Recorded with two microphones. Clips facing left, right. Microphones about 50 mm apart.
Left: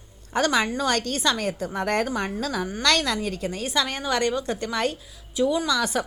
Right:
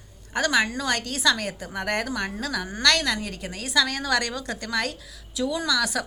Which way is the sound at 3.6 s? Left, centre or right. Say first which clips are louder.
Right 4 dB; left.